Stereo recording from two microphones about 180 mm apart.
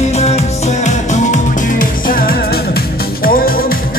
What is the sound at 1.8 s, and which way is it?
Music, 50° left (ahead or behind).